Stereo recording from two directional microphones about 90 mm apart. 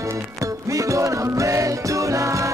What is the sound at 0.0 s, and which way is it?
Music, 35° right (ahead or behind).